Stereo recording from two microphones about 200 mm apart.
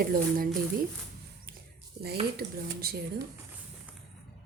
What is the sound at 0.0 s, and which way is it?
Speech, 45° right (ahead or behind).